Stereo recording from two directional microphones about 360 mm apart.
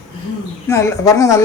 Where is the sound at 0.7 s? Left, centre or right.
Centre.